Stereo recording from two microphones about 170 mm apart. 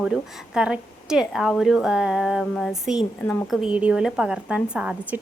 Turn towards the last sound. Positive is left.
turn(degrees=-10)  # may be behind; listen again after turning